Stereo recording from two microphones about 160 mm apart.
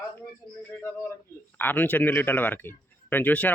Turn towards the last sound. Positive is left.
turn(degrees=10)  # may be behind; listen again after turning